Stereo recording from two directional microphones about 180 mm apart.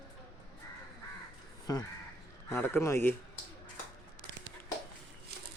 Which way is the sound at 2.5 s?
15° left (ahead or behind).